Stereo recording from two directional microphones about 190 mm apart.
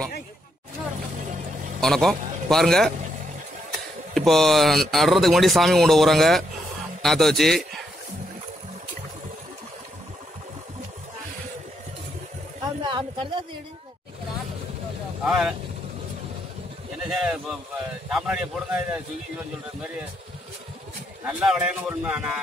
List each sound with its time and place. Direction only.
1.8 s a man's voice: centre (ahead or behind)
4.1 s a man's voice: centre (ahead or behind)
12.8 s a sound: 25° right (ahead or behind)
15.2 s speech: 5° right (ahead or behind)
17.1 s speech: centre (ahead or behind)
21.3 s speech: 5° right (ahead or behind)